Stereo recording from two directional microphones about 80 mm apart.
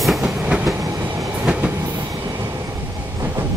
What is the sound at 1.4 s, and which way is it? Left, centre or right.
Train, centre.